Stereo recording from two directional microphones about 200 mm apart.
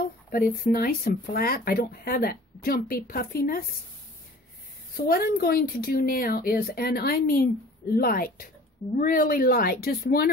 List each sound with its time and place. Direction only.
0.7 s speech: 50° left (ahead or behind)
4.9 s speech: 50° left (ahead or behind)